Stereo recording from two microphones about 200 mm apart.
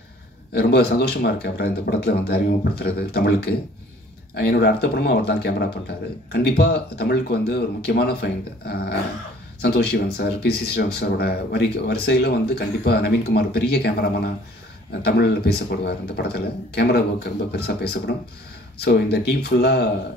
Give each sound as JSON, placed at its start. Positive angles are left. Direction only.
{"t": 0.5, "sound": "speech", "side_deg": 55}